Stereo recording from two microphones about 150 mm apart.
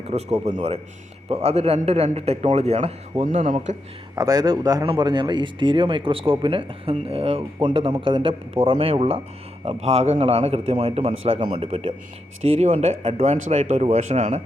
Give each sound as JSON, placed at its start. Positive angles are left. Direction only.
{"t": 0.1, "sound": "a man's voice", "side_deg": -45}
{"t": 3.2, "sound": "speech", "side_deg": -60}
{"t": 4.1, "sound": "a man's voice", "side_deg": -25}